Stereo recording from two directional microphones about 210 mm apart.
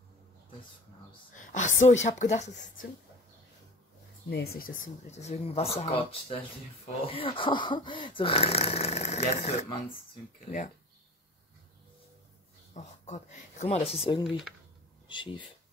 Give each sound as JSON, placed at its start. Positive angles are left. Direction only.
{"t": 1.3, "sound": "speech", "side_deg": 35}
{"t": 4.3, "sound": "speech", "side_deg": 50}
{"t": 12.7, "sound": "speech", "side_deg": 35}
{"t": 14.2, "sound": "speech", "side_deg": 0}
{"t": 15.0, "sound": "speech", "side_deg": 25}